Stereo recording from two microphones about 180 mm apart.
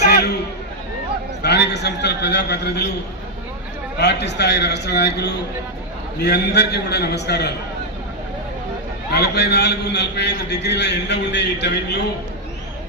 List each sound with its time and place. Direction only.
0.1 s a sound: 60° left (ahead or behind)
1.4 s a man's voice: 70° left (ahead or behind)
4.0 s a man's voice: 70° left (ahead or behind)
9.0 s a man's voice: 65° left (ahead or behind)